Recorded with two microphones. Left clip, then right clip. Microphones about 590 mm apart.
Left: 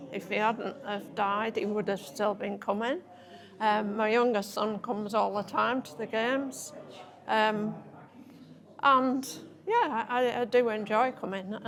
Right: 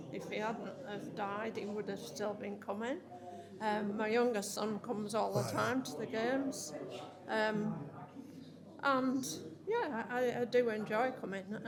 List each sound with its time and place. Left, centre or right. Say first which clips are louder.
0.1 s speech: left 11 dB; left
8.8 s speech: left 10 dB; left